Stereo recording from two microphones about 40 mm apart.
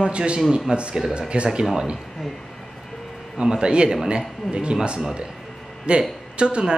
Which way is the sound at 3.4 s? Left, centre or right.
Right.